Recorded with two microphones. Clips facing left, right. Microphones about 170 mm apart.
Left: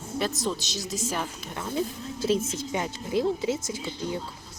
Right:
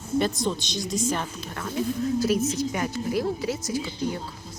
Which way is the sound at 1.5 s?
25° left (ahead or behind).